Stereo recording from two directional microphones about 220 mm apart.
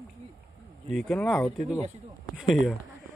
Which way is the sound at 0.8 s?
Centre (ahead or behind).